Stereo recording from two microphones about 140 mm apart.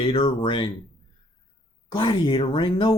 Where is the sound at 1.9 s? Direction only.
35° left (ahead or behind).